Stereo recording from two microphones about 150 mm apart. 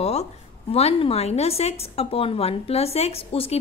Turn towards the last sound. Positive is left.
turn(degrees=40)  # may be behind; listen again after turning